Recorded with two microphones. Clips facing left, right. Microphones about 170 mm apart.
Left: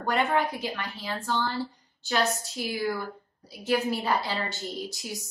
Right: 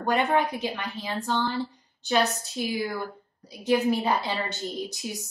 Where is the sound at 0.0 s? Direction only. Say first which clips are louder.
Right 2 dB; 20° right (ahead or behind).